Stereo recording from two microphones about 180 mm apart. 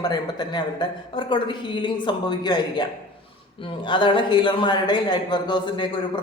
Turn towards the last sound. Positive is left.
turn(degrees=25)  # may be behind; listen again after turning